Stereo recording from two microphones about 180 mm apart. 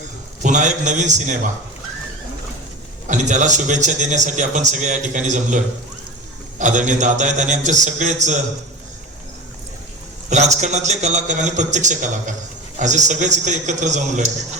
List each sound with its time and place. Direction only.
0.4 s a man's voice: 45° right (ahead or behind)
3.1 s a man's voice: 40° right (ahead or behind)
10.2 s a man's voice: 40° right (ahead or behind)